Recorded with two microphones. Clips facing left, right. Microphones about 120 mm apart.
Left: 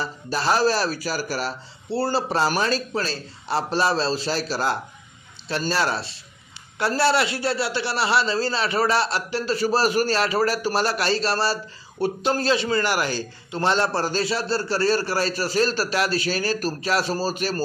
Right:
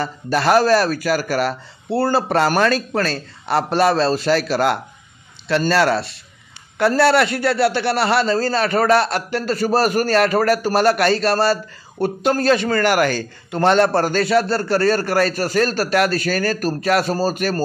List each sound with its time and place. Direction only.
0.0 s a man's voice: 60° right (ahead or behind)